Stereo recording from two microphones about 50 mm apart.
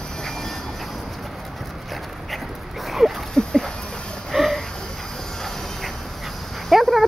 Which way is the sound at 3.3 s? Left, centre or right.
Centre.